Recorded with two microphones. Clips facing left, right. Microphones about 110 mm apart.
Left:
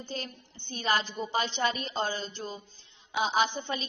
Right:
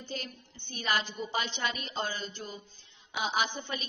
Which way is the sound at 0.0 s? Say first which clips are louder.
Left 2 dB; 35° left (ahead or behind).